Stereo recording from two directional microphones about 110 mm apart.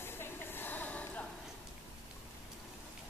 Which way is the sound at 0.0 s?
20° left (ahead or behind).